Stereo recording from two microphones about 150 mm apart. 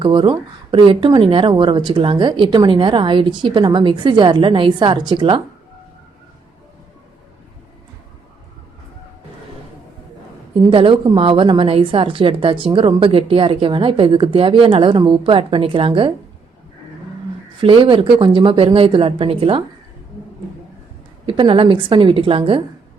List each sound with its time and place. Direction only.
0.0 s a woman's voice: 30° right (ahead or behind)
10.7 s a woman's voice: 35° right (ahead or behind)
17.6 s a woman's voice: 35° right (ahead or behind)
21.2 s a woman's voice: 35° right (ahead or behind)